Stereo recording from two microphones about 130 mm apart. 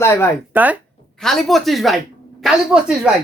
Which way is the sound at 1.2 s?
Centre (ahead or behind).